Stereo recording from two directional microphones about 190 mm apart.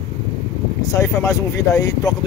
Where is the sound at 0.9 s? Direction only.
15° left (ahead or behind).